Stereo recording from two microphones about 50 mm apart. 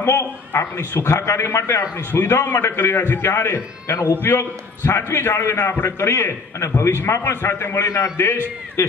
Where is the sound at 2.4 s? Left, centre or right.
Left.